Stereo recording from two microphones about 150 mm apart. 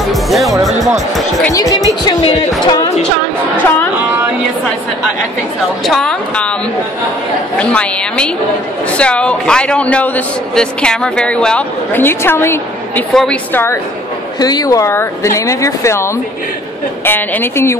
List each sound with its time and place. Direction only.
0.0 s speech: centre (ahead or behind)
1.5 s speech: 25° left (ahead or behind)
5.9 s speech: 5° left (ahead or behind)
7.5 s a man's voice: 5° left (ahead or behind)
13.1 s speech: 5° left (ahead or behind)
13.5 s a man's voice: 15° left (ahead or behind)
14.4 s a man's voice: 25° left (ahead or behind)